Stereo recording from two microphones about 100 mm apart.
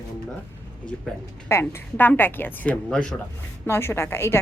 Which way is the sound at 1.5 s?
25° left (ahead or behind).